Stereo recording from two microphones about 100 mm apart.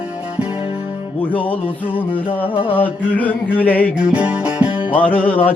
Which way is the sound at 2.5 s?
65° left (ahead or behind).